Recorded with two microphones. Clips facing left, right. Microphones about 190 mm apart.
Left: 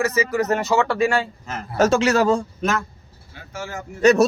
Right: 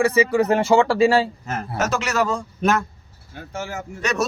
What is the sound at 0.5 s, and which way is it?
Speech, 30° right (ahead or behind).